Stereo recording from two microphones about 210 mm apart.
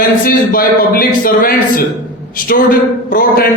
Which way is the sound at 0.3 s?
45° left (ahead or behind).